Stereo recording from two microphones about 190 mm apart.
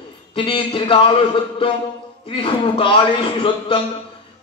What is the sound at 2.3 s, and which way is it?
A man's voice, 30° left (ahead or behind).